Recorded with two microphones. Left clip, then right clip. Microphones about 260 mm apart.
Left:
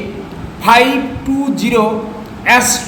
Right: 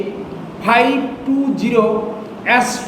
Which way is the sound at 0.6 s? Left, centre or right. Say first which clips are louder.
Left 4 dB; centre.